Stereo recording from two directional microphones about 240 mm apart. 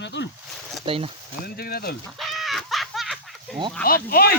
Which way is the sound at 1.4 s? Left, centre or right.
Left.